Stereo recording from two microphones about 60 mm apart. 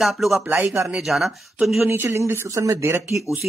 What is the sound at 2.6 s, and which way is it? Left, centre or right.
Speech, right.